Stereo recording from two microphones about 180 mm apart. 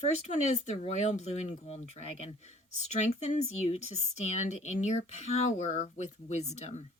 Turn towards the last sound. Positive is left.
turn(degrees=40)  # may be behind; listen again after turning